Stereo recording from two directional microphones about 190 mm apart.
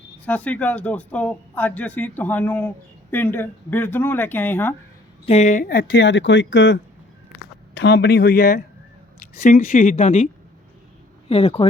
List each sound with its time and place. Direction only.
0.3 s speech: 5° left (ahead or behind)
5.2 s speech: 35° left (ahead or behind); by 6.7 s 75° left (ahead or behind)
7.7 s speech: 65° left (ahead or behind); by 10.2 s 40° left (ahead or behind)
11.3 s speech: 30° left (ahead or behind)